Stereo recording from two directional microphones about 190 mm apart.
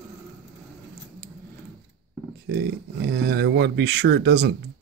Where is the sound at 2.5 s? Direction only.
60° right (ahead or behind).